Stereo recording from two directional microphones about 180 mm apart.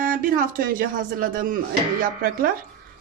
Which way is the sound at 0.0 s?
50° right (ahead or behind).